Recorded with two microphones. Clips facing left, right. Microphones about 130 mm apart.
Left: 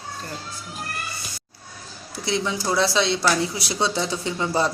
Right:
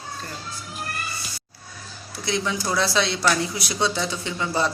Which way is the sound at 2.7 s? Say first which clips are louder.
Left 3 dB; 25° left (ahead or behind).